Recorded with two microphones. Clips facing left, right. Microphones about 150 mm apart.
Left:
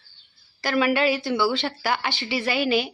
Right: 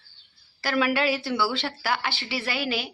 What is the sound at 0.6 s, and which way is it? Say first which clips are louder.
Speech: left 3 dB; centre (ahead or behind).